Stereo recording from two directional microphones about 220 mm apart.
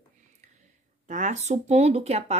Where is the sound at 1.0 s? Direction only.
35° right (ahead or behind).